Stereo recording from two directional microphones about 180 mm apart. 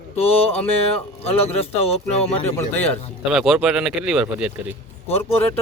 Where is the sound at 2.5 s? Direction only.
10° left (ahead or behind).